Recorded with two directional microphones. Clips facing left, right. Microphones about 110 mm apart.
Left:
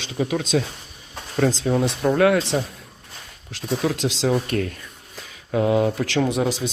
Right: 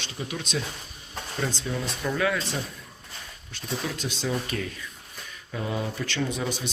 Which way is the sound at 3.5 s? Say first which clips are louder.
Left 9 dB; 85° left.